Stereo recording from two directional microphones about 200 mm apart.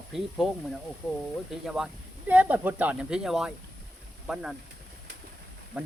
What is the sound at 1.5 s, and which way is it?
Speech, centre (ahead or behind).